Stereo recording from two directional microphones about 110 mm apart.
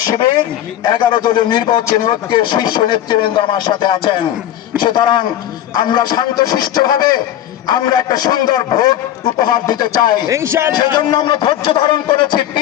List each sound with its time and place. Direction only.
0.9 s a man's voice: 45° left (ahead or behind)
10.2 s a man's voice: 25° right (ahead or behind)
10.7 s speech: 40° left (ahead or behind)